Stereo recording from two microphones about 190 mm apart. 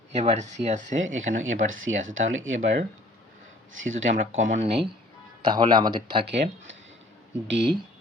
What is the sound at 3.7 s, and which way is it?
Speech, 90° right.